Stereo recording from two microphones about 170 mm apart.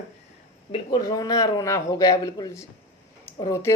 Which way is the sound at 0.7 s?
25° left (ahead or behind).